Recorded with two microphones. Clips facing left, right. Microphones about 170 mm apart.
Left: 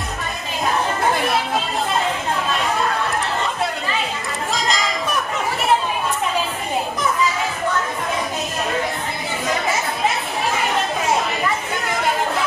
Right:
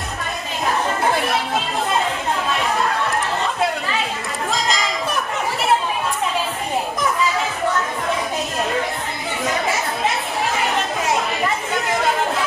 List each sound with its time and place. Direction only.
4.5 s church bell: centre (ahead or behind)